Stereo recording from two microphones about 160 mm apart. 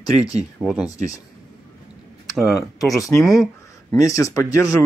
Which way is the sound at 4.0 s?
20° left (ahead or behind).